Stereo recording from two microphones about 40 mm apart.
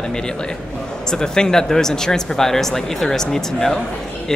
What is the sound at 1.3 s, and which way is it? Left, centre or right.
A man's voice, centre.